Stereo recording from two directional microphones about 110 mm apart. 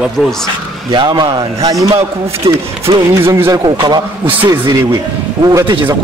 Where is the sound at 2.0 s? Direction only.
65° right (ahead or behind).